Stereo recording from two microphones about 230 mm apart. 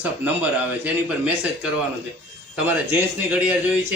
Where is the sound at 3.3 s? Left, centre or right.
Centre.